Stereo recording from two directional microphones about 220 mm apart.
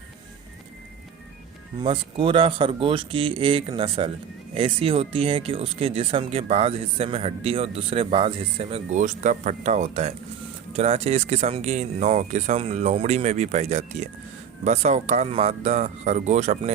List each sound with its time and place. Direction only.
1.8 s speech: 20° right (ahead or behind)